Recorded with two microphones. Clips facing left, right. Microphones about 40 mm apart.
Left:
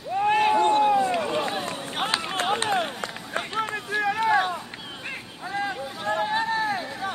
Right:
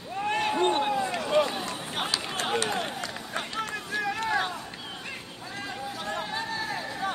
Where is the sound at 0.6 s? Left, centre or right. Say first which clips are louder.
Left 5 dB; right.